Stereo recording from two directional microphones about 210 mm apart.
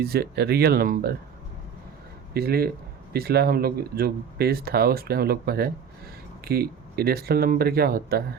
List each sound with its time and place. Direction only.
0.0 s a man's voice: 50° right (ahead or behind)
2.3 s a man's voice: 50° right (ahead or behind)